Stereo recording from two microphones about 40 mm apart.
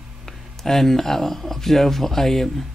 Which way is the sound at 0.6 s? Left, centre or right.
Centre.